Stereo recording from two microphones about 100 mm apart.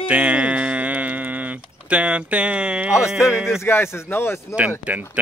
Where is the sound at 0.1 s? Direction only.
15° right (ahead or behind).